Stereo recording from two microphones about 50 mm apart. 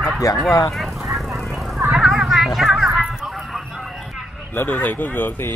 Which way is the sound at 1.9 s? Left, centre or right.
Centre.